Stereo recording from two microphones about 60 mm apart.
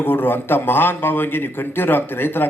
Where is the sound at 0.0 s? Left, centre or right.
Left.